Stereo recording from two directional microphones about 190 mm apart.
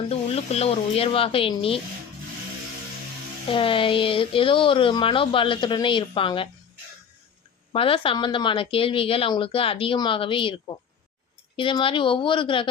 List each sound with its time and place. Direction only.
0.1 s speech: 30° left (ahead or behind)
3.5 s speech: 25° left (ahead or behind)
7.7 s speech: 30° left (ahead or behind)
11.5 s speech: 25° left (ahead or behind)